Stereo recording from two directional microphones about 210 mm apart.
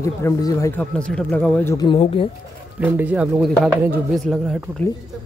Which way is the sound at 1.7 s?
25° left (ahead or behind).